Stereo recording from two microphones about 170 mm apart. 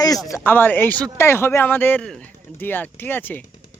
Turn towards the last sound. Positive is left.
turn(degrees=10)  # may be behind; listen again after turning